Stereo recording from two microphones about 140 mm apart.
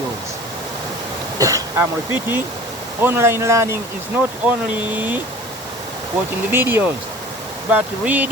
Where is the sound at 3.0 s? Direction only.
15° right (ahead or behind).